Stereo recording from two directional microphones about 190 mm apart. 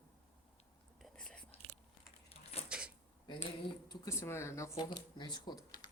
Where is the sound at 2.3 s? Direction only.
30° left (ahead or behind).